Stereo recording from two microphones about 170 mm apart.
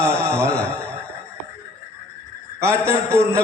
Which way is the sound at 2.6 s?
15° right (ahead or behind).